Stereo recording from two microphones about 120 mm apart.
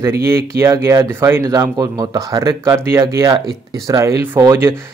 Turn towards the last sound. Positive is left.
turn(degrees=-25)  # may be behind; listen again after turning